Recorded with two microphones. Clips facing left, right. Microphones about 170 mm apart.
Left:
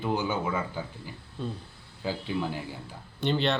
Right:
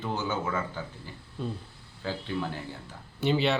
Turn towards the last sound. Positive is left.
turn(degrees=-5)  # may be behind; listen again after turning